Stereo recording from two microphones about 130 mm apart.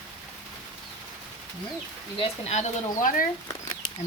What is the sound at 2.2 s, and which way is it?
Speech, 55° left (ahead or behind).